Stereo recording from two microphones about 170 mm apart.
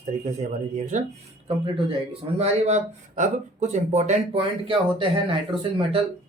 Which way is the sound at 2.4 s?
40° right (ahead or behind).